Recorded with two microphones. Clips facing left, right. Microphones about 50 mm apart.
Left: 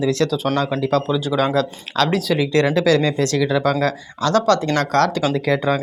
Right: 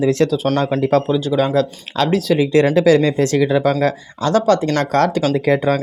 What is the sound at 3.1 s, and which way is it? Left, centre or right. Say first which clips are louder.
Speech: right 3 dB; right.